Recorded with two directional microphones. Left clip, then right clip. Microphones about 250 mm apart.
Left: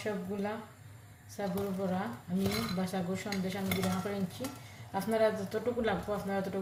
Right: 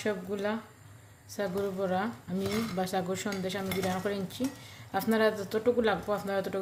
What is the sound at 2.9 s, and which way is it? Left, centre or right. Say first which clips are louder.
Speech: right 4 dB; right.